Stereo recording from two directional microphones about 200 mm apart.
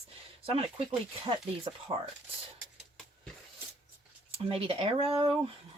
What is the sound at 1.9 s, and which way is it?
Speech, 20° right (ahead or behind).